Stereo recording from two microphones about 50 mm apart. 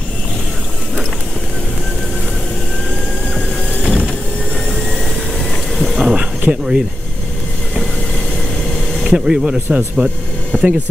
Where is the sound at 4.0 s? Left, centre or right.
Left.